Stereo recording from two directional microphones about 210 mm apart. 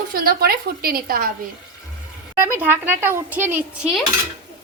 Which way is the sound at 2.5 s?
10° right (ahead or behind).